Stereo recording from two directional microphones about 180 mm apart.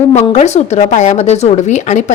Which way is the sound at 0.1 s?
40° left (ahead or behind).